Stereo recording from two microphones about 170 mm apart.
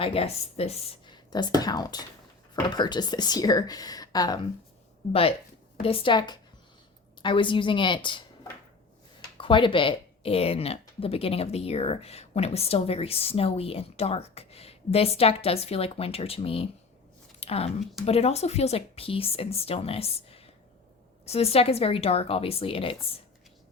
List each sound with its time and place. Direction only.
0.0 s a woman's voice: 35° left (ahead or behind)
5.8 s speech: 30° left (ahead or behind)
9.4 s speech: 30° left (ahead or behind)